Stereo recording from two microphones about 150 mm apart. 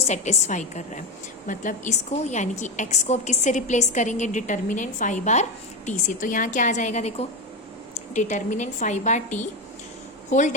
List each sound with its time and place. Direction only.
0.1 s a woman's voice: 50° left (ahead or behind)